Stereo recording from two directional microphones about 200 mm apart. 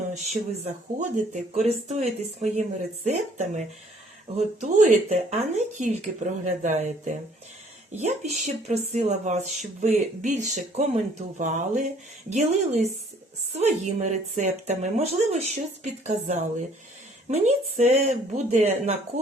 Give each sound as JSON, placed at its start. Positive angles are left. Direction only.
{"t": 0.1, "sound": "speech", "side_deg": -35}